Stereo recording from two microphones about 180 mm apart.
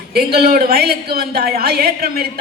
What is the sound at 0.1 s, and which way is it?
A woman's voice, 60° right (ahead or behind).